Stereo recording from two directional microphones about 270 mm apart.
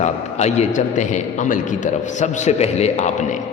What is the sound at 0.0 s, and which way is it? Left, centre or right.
A man's voice, left.